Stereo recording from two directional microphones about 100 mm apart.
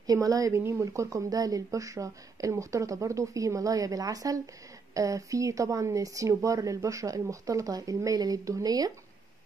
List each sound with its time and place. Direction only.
0.0 s a woman's voice: 35° right (ahead or behind)